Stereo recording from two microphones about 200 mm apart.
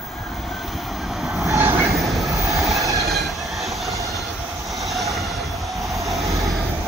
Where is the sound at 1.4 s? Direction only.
10° right (ahead or behind).